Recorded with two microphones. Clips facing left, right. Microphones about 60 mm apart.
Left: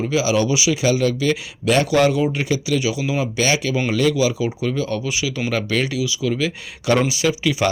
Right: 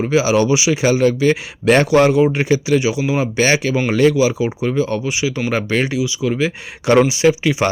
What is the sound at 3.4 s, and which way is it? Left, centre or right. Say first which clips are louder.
Speech: right 4 dB; right.